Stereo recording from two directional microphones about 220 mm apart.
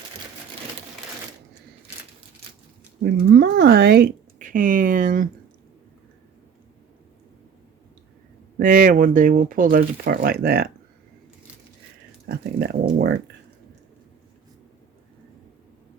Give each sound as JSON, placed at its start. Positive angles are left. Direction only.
{"t": 3.0, "sound": "speech", "side_deg": -45}
{"t": 8.5, "sound": "speech", "side_deg": -40}
{"t": 12.3, "sound": "speech", "side_deg": -45}